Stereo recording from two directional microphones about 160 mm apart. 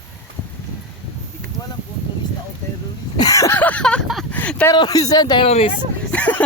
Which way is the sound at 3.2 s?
20° left (ahead or behind).